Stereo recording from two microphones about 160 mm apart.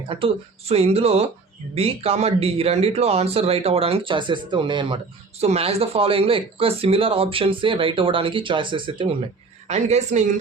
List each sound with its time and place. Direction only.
0.1 s speech: 35° right (ahead or behind)
9.6 s a woman's voice: 45° right (ahead or behind)